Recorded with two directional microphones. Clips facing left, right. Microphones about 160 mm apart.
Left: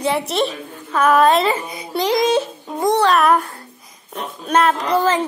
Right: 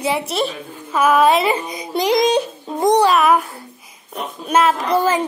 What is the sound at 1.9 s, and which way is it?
A child's voice, 15° right (ahead or behind).